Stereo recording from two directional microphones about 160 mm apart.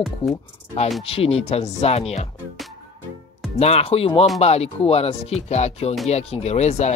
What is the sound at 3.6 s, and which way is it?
Speech, 40° left (ahead or behind).